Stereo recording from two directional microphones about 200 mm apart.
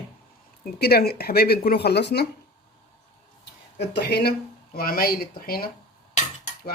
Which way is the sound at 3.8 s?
55° left (ahead or behind).